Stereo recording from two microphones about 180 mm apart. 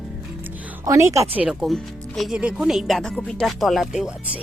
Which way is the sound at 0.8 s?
15° right (ahead or behind).